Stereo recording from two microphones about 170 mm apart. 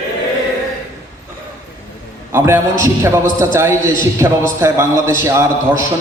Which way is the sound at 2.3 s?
15° right (ahead or behind).